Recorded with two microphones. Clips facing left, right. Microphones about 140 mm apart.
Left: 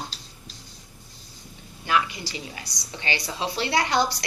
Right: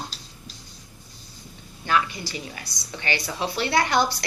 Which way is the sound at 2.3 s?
20° left (ahead or behind).